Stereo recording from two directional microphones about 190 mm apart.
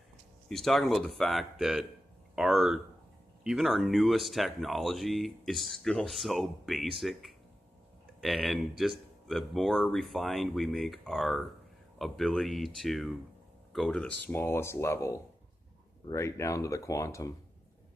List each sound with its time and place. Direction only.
0.4 s speech: centre (ahead or behind)